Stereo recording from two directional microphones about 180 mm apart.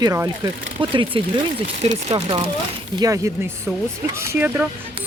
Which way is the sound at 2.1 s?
25° right (ahead or behind).